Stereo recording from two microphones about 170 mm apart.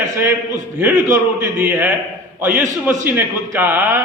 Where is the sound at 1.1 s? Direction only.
15° right (ahead or behind).